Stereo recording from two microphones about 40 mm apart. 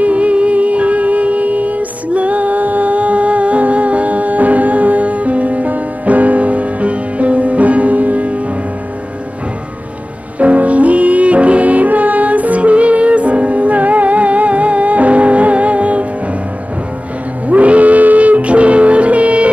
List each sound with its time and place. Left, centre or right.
0.0 s music: right
10.4 s music: right
17.5 s music: right